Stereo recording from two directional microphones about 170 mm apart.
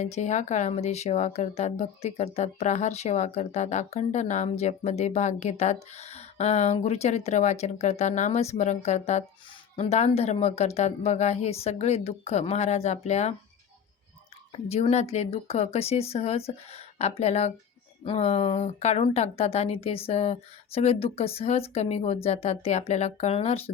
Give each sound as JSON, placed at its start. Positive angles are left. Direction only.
{"t": 0.0, "sound": "speech", "side_deg": 40}
{"t": 14.5, "sound": "speech", "side_deg": 40}